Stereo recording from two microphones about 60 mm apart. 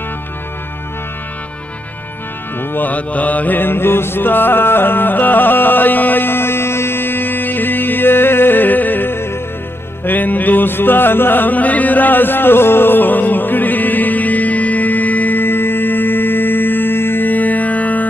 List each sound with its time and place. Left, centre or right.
2.7 s mantra: left
10.0 s music: left